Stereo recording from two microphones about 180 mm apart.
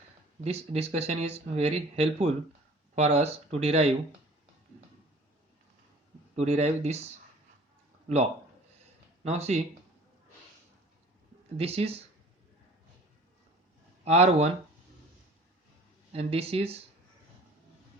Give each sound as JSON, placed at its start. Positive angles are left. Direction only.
{"t": 0.4, "sound": "speech", "side_deg": -35}
{"t": 6.3, "sound": "speech", "side_deg": -35}
{"t": 9.2, "sound": "speech", "side_deg": -35}
{"t": 11.5, "sound": "speech", "side_deg": -35}
{"t": 14.0, "sound": "speech", "side_deg": -35}
{"t": 16.1, "sound": "speech", "side_deg": -35}